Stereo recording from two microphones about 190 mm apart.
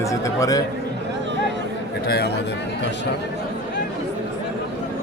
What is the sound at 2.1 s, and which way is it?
Speech, 55° left (ahead or behind).